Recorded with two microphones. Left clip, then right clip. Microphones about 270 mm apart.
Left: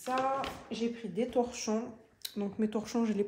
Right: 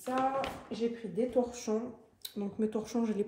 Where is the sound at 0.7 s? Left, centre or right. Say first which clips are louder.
Right 2 dB; centre.